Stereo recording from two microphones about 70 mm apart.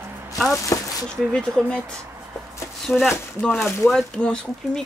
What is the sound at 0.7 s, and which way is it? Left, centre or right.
Speech, left.